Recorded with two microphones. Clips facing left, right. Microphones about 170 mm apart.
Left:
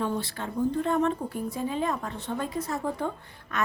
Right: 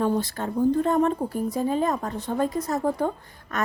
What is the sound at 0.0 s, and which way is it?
Speech, 40° right (ahead or behind).